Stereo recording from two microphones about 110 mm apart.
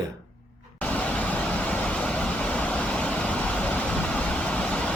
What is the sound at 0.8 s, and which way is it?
Vehicle, 10° left (ahead or behind).